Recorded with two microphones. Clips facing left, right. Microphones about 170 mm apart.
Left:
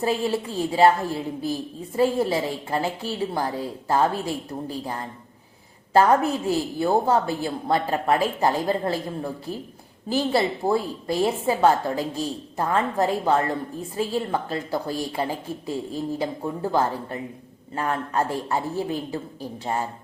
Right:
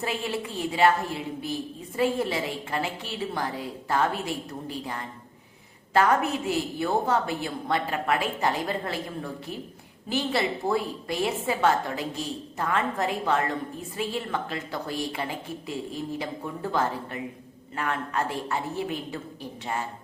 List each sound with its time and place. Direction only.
0.0 s a woman's voice: 35° left (ahead or behind)